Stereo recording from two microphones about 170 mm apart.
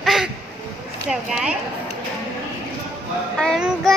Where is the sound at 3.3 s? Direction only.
5° left (ahead or behind).